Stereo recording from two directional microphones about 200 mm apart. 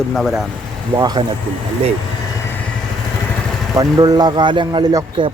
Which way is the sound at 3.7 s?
15° right (ahead or behind).